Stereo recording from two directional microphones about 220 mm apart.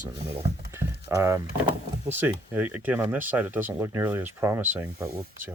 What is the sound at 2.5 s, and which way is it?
Speech, 10° right (ahead or behind).